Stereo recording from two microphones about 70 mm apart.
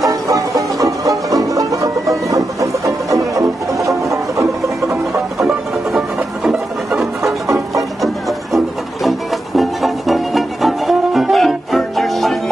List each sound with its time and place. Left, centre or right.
0.0 s music: right
9.6 s music: centre